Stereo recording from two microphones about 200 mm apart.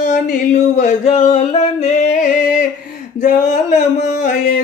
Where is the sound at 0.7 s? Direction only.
35° left (ahead or behind).